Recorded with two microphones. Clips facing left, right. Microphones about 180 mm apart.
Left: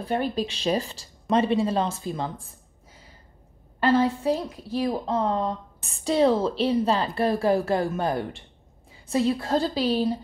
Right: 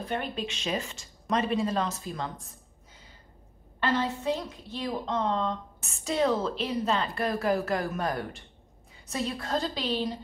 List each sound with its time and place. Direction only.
0.0 s a woman's voice: 35° left (ahead or behind)
3.8 s a woman's voice: 30° left (ahead or behind)